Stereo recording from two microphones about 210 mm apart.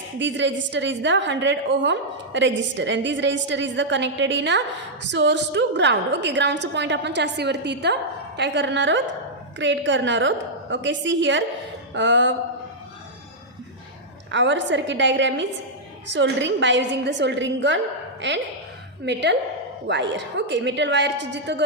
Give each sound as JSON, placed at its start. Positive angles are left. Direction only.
{"t": 0.2, "sound": "a woman's voice", "side_deg": -60}
{"t": 14.3, "sound": "a woman's voice", "side_deg": -60}
{"t": 19.0, "sound": "a woman's voice", "side_deg": -55}